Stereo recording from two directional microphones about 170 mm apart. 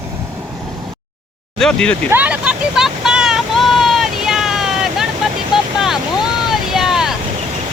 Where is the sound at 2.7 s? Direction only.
5° right (ahead or behind).